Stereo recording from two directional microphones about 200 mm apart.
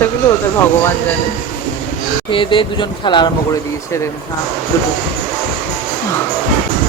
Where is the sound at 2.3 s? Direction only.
25° left (ahead or behind).